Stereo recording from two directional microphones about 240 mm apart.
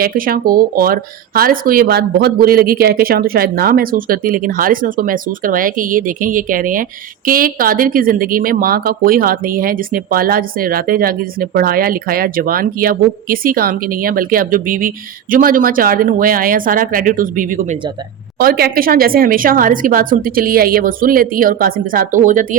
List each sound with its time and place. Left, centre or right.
0.0 s speech: right